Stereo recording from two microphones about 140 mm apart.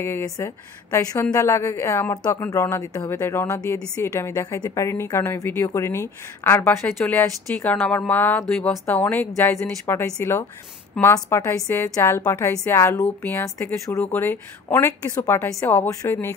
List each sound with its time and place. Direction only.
0.0 s a woman's voice: 20° left (ahead or behind)